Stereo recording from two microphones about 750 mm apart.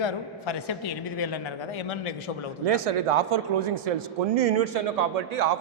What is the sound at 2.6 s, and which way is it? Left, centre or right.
A man's voice, right.